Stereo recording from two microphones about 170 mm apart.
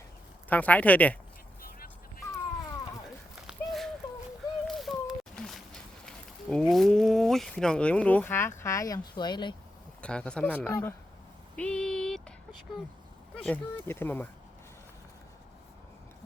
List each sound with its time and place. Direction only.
0.4 s speech: 10° left (ahead or behind)
1.6 s music: 60° left (ahead or behind)
3.4 s a sound: centre (ahead or behind)
4.7 s speech: centre (ahead or behind); by 9.6 s 25° left (ahead or behind)
10.0 s speech: 5° left (ahead or behind)
11.5 s a sound: 5° left (ahead or behind)
13.4 s speech: 10° left (ahead or behind)